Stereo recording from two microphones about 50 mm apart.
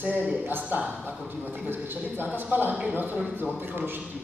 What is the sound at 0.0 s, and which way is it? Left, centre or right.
A man's voice, right.